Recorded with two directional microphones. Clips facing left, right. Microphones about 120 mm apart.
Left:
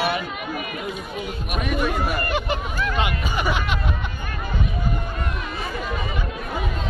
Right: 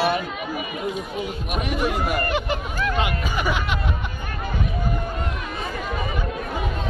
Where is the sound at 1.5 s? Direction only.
30° right (ahead or behind).